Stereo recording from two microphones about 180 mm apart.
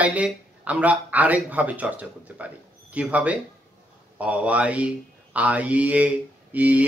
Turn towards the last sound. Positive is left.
turn(degrees=-10)  # may be behind; listen again after turning